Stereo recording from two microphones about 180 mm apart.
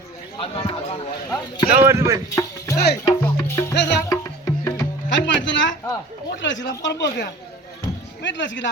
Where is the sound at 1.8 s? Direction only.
15° right (ahead or behind).